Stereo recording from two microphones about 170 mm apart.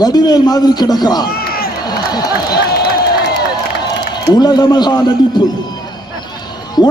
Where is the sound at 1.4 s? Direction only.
60° left (ahead or behind).